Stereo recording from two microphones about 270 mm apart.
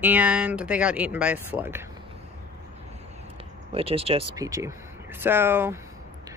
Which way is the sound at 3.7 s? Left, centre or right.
Right.